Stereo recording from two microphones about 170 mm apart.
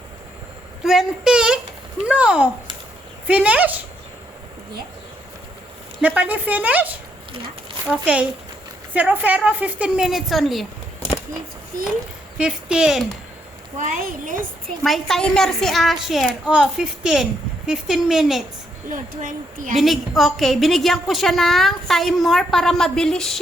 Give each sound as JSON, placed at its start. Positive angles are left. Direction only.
{"t": 0.9, "sound": "a sound", "side_deg": 0}
{"t": 2.0, "sound": "a woman's voice", "side_deg": -5}
{"t": 6.0, "sound": "a woman's voice", "side_deg": -10}
{"t": 12.4, "sound": "a woman's voice", "side_deg": -5}
{"t": 13.7, "sound": "speech", "side_deg": -50}
{"t": 14.8, "sound": "a woman's voice", "side_deg": 0}
{"t": 18.9, "sound": "speech", "side_deg": -55}
{"t": 19.7, "sound": "a woman's voice", "side_deg": 0}